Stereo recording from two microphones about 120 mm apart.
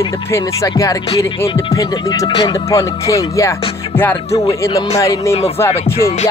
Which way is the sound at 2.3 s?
35° left (ahead or behind).